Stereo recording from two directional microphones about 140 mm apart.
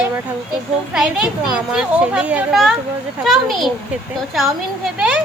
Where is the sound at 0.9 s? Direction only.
5° right (ahead or behind).